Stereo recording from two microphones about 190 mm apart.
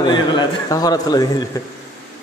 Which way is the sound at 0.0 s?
25° left (ahead or behind).